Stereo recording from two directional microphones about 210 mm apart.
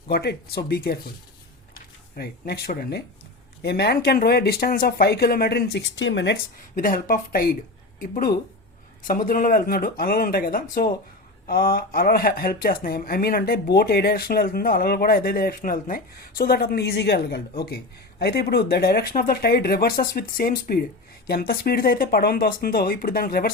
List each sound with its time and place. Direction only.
0.1 s speech: 50° left (ahead or behind)
6.7 s speech: 40° left (ahead or behind)